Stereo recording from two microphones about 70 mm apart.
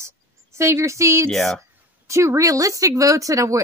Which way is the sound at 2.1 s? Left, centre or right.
Right.